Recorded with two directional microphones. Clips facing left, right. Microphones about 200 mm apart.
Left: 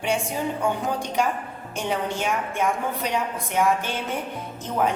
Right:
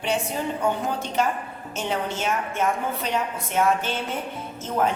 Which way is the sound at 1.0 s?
15° left (ahead or behind).